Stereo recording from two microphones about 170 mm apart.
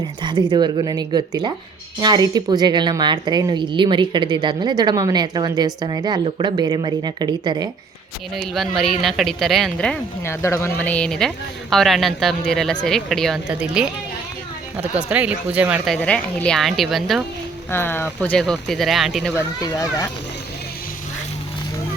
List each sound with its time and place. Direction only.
0.2 s a woman's voice: 25° right (ahead or behind)
8.4 s speech: centre (ahead or behind)
10.4 s speech: 15° left (ahead or behind); by 16.0 s 10° right (ahead or behind)
16.0 s speech: 5° left (ahead or behind)
17.7 s speech: 15° left (ahead or behind)
19.3 s speech: 20° left (ahead or behind)